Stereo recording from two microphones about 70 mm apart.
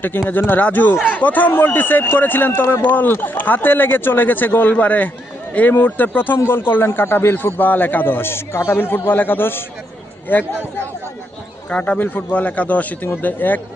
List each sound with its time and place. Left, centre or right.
0.3 s speech: left
10.5 s speech: right
11.7 s speech: centre